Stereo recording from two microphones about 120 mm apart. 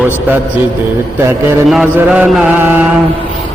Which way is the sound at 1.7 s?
10° right (ahead or behind).